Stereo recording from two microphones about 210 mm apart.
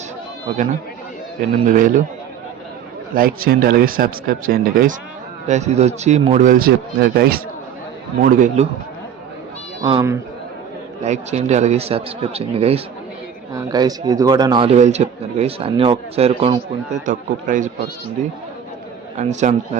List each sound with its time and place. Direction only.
0.5 s speech: 35° right (ahead or behind)
3.2 s speech: 45° right (ahead or behind)
9.8 s speech: 20° right (ahead or behind)
11.0 s a man's voice: 30° right (ahead or behind)
13.5 s a man's voice: 15° right (ahead or behind)
17.1 s speech: 40° right (ahead or behind)
19.1 s speech: 35° right (ahead or behind)